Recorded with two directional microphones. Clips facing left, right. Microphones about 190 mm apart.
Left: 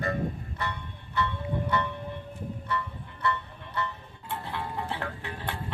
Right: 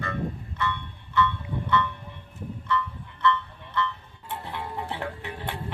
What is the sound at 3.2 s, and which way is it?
Music, 35° left (ahead or behind).